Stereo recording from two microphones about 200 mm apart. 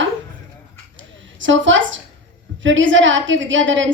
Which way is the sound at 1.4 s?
70° right (ahead or behind).